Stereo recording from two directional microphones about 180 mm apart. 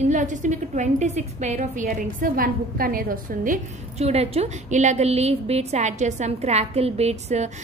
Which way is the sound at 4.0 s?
35° right (ahead or behind).